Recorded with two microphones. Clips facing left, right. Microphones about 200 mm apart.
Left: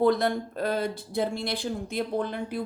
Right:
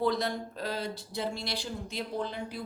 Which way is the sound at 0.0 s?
55° left (ahead or behind).